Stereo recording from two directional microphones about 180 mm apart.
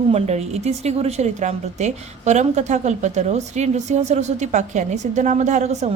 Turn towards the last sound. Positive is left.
turn(degrees=-40)  # may be behind; listen again after turning